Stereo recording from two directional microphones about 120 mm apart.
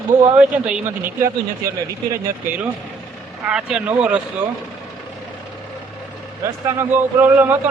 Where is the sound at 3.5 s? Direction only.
5° right (ahead or behind).